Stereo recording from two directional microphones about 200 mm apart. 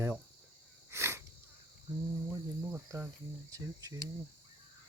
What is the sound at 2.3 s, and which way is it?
Cricket, 15° right (ahead or behind).